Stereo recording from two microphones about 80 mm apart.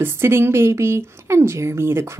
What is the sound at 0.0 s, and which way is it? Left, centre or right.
Speech, right.